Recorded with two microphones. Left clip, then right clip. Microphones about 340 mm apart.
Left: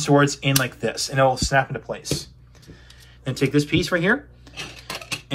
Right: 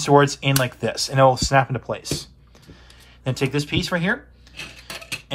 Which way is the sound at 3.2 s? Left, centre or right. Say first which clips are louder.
Left 2 dB; centre.